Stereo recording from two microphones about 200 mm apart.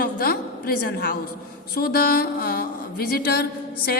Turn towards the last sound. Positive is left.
turn(degrees=50)  # may be behind; listen again after turning